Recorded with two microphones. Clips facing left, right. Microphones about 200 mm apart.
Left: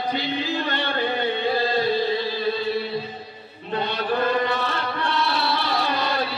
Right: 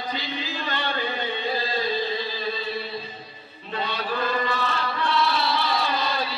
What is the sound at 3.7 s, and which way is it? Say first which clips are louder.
Chant: left 4 dB; 55° left (ahead or behind).